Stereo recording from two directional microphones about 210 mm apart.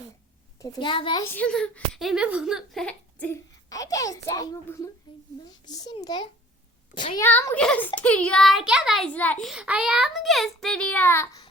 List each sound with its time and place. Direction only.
0.6 s a child's voice: 25° left (ahead or behind)
1.3 s a child's voice: 5° left (ahead or behind); by 7.3 s 20° left (ahead or behind)
7.3 s a child's voice: 10° left (ahead or behind)